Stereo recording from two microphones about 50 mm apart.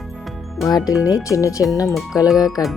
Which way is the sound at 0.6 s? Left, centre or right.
Centre.